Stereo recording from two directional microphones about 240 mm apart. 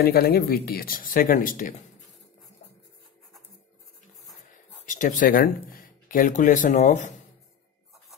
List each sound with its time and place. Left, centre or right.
0.0 s speech: left
4.5 s speech: left